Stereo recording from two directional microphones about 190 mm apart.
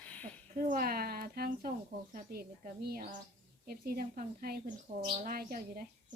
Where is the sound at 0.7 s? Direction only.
50° right (ahead or behind).